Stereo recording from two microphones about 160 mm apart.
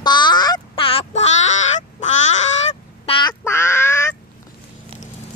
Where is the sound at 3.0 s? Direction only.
30° left (ahead or behind).